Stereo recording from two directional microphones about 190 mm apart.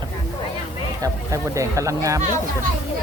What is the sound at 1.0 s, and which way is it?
Speech, 15° right (ahead or behind).